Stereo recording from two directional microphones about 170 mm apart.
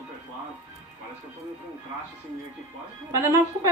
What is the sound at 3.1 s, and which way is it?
Speech, 15° right (ahead or behind).